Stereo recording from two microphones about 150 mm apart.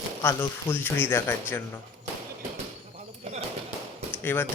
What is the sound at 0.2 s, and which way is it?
Speech, 15° left (ahead or behind).